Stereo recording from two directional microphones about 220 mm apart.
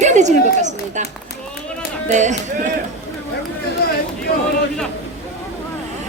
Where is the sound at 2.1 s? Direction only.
35° right (ahead or behind).